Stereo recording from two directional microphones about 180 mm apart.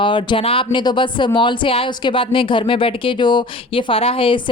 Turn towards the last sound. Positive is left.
turn(degrees=30)  # may be behind; listen again after turning